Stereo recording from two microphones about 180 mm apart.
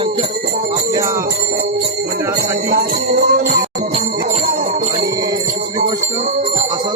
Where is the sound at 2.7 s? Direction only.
55° right (ahead or behind).